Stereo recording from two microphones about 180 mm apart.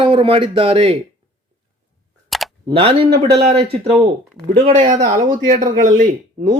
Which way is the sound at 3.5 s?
30° right (ahead or behind).